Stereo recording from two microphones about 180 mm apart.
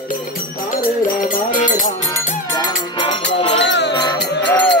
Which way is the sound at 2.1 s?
15° left (ahead or behind).